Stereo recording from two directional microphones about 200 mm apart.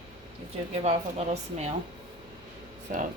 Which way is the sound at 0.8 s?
35° right (ahead or behind).